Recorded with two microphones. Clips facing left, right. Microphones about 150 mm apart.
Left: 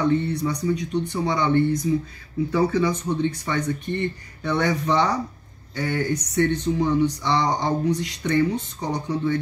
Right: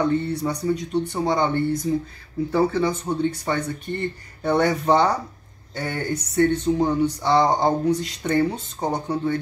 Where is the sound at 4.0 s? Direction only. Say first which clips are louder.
Left 1 dB; 40° right (ahead or behind).